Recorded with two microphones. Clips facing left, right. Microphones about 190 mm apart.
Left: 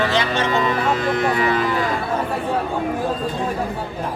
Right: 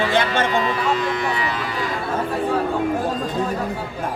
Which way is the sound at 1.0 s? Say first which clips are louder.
Left 4 dB; 50° left (ahead or behind).